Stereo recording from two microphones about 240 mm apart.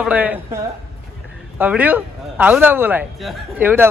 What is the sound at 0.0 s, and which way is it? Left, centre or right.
Speech, centre.